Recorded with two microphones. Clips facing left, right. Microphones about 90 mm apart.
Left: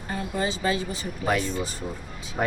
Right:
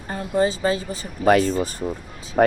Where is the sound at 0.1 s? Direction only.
35° right (ahead or behind).